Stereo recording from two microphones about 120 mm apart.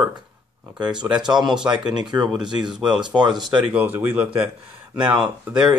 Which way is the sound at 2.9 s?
40° right (ahead or behind).